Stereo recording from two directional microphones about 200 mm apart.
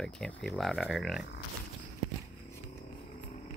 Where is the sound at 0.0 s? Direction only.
5° left (ahead or behind).